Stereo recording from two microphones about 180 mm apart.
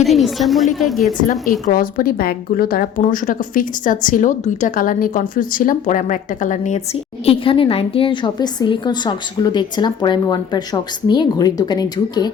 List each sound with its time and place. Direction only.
0.0 s a woman's voice: centre (ahead or behind)
1.3 s a woman's voice: 50° left (ahead or behind)
7.3 s a woman's voice: 30° left (ahead or behind)